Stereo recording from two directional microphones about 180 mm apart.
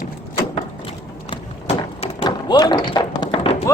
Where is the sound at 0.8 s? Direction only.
30° left (ahead or behind).